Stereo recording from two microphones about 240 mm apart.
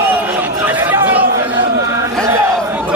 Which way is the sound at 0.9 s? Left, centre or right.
Centre.